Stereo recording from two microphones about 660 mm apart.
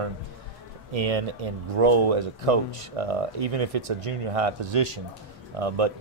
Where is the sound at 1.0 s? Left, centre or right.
Right.